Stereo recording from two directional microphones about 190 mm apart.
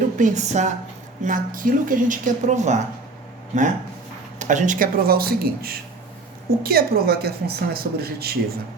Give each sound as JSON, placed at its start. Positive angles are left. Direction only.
{"t": 0.2, "sound": "a woman's voice", "side_deg": -40}